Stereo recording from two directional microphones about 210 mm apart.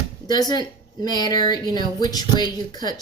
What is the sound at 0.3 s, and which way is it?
Speech, 20° left (ahead or behind).